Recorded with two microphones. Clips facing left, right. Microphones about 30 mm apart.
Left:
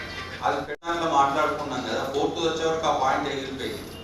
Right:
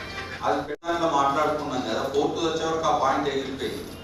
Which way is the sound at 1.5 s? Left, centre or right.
Centre.